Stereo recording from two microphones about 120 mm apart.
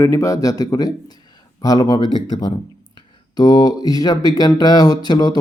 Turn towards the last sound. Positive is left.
turn(degrees=35)  # may be behind; listen again after turning